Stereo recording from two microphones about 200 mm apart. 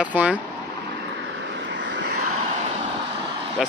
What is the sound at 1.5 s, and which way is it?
Vehicle, 60° right (ahead or behind).